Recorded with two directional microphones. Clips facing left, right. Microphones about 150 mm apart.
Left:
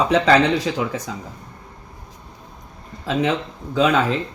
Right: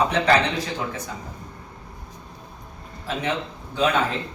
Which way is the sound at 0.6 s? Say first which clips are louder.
Left 6 dB; 90° left.